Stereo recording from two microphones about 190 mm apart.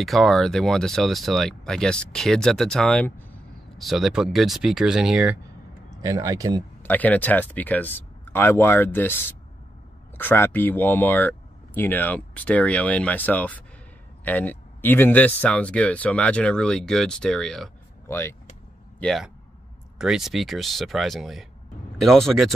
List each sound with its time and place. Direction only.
0.0 s speech: centre (ahead or behind)
5.9 s speech: 20° right (ahead or behind)
6.8 s speech: 10° left (ahead or behind)
18.9 s speech: centre (ahead or behind)